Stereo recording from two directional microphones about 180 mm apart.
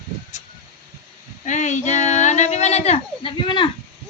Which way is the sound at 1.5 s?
40° left (ahead or behind).